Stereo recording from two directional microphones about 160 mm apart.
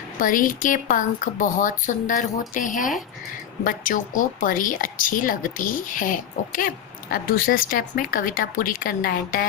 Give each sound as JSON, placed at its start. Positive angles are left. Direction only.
{"t": 0.2, "sound": "a woman's voice", "side_deg": 55}